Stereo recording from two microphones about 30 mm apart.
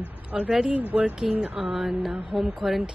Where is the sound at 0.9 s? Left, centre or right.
Right.